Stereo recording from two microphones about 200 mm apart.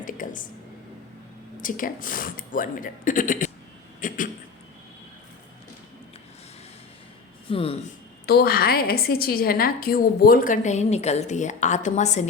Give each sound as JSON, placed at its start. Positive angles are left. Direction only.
{"t": 0.0, "sound": "a sound", "side_deg": 40}
{"t": 1.6, "sound": "speech", "side_deg": 40}
{"t": 7.5, "sound": "speech", "side_deg": 30}
{"t": 8.3, "sound": "a woman's voice", "side_deg": 50}